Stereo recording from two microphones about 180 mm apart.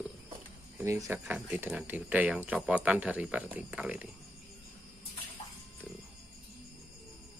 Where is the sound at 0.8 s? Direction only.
15° right (ahead or behind).